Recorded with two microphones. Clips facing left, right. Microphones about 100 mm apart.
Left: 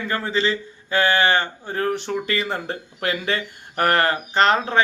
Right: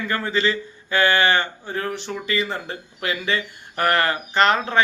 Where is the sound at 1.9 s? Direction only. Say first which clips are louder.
Left 1 dB; 50° left (ahead or behind).